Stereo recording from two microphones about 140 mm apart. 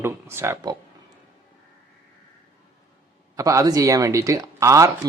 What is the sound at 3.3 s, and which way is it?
Speech, 25° right (ahead or behind).